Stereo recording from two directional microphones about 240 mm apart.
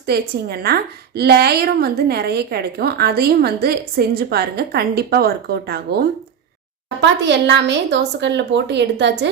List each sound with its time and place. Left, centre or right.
0.0 s a woman's voice: right